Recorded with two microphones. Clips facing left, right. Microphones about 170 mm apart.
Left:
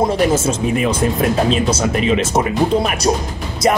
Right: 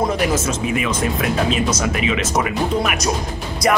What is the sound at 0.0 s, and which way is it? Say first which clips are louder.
Speech: left 4 dB; 30° left (ahead or behind).